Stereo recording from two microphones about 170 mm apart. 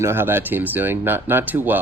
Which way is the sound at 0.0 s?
15° right (ahead or behind).